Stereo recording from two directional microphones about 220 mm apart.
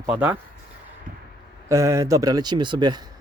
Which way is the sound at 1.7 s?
15° right (ahead or behind).